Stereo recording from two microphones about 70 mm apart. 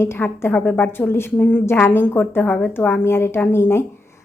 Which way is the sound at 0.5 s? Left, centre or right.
Left.